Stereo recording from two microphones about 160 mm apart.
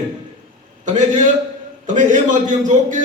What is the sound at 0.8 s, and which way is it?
Speech, 50° right (ahead or behind).